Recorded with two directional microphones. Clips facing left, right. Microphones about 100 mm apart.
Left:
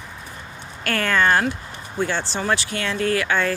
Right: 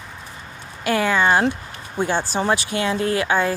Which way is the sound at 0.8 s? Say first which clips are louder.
Right 2 dB; 10° right (ahead or behind).